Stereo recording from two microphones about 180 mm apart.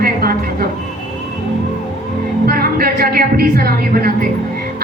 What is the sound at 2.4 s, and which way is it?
A man's voice, 55° right (ahead or behind).